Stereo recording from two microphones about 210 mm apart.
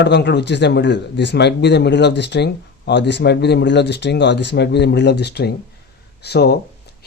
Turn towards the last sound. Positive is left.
turn(degrees=50)  # may be behind; listen again after turning